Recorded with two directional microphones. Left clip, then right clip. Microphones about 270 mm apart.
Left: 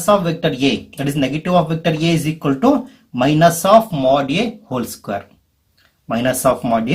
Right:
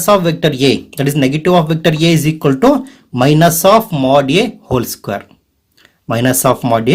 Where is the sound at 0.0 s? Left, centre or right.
Right.